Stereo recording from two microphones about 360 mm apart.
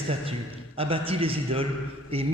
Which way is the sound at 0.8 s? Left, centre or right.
Centre.